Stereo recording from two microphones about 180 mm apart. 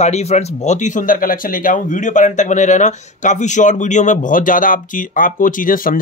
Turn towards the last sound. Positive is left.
turn(degrees=50)  # may be behind; listen again after turning